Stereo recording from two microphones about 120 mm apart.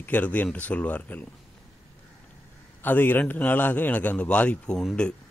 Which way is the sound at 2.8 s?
15° left (ahead or behind).